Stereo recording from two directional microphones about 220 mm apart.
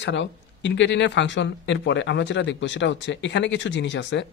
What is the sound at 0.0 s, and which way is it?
Speech, 55° left (ahead or behind).